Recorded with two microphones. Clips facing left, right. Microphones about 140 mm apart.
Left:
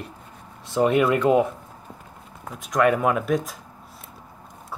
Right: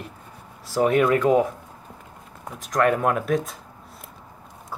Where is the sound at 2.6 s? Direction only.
Centre (ahead or behind).